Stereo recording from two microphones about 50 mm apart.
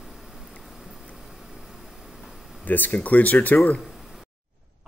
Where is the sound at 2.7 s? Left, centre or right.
Left.